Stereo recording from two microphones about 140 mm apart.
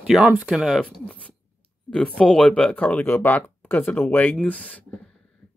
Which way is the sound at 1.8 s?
5° left (ahead or behind).